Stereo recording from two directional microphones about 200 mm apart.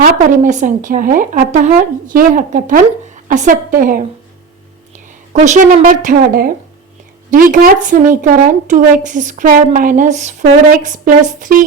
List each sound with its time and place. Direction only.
0.0 s speech: 40° right (ahead or behind)
5.3 s speech: 35° right (ahead or behind)